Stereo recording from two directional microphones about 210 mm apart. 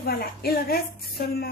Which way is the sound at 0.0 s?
45° left (ahead or behind).